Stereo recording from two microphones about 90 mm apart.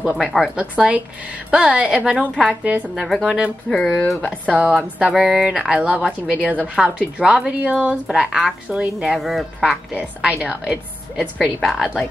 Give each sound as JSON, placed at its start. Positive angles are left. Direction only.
{"t": 0.0, "sound": "a woman's voice", "side_deg": -10}
{"t": 3.0, "sound": "speech", "side_deg": 0}
{"t": 3.3, "sound": "a woman's voice", "side_deg": -10}
{"t": 3.7, "sound": "speech", "side_deg": 10}
{"t": 4.5, "sound": "a woman's voice", "side_deg": -15}
{"t": 9.9, "sound": "a woman's voice", "side_deg": -15}